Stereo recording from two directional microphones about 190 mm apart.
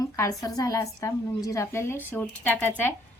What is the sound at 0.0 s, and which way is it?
A woman's voice, 15° left (ahead or behind).